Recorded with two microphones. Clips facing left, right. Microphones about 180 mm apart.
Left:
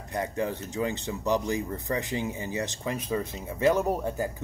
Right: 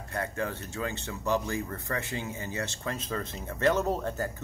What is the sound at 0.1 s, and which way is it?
Speech, 15° left (ahead or behind).